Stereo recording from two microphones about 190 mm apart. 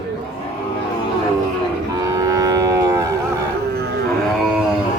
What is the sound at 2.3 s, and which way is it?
Livestock, 15° right (ahead or behind).